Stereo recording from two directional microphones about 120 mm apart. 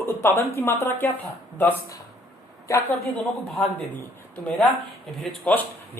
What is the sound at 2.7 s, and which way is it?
Speech, 25° left (ahead or behind).